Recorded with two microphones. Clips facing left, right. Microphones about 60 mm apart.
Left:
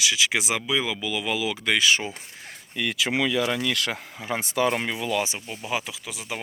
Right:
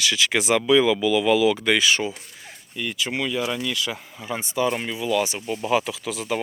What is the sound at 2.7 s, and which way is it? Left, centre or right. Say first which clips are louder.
Speech: left 2 dB; left.